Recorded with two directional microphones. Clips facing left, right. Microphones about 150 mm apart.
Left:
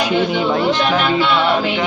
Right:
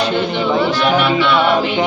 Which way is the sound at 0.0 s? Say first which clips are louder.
Left 1 dB; 10° left (ahead or behind).